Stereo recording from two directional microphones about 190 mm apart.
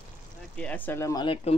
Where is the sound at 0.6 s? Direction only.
10° left (ahead or behind); by 1.5 s 25° left (ahead or behind).